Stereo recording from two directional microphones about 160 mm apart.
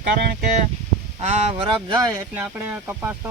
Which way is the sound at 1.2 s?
40° right (ahead or behind).